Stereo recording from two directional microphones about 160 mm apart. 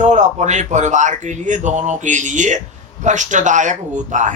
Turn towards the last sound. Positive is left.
turn(degrees=-50)  # may be behind; listen again after turning